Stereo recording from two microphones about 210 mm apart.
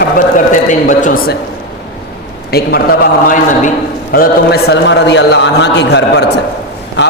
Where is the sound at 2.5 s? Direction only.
50° left (ahead or behind).